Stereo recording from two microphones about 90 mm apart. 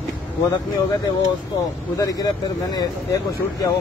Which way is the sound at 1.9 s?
40° left (ahead or behind).